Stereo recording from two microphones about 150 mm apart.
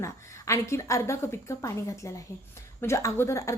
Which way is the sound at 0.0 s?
20° left (ahead or behind).